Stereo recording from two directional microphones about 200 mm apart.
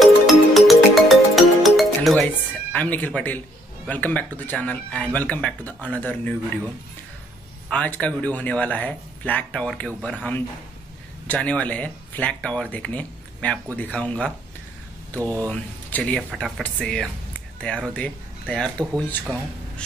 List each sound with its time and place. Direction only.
0.0 s music: centre (ahead or behind)
2.7 s speech: 10° left (ahead or behind)
7.7 s speech: 5° left (ahead or behind)